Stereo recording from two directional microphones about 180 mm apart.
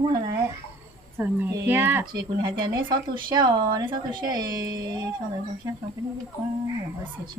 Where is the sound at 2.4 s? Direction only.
25° right (ahead or behind).